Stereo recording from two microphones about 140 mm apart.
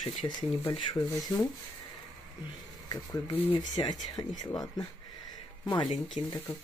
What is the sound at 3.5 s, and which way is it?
Speech, 35° left (ahead or behind).